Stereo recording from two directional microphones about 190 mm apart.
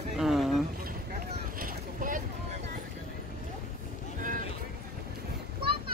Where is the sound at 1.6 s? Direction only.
45° right (ahead or behind).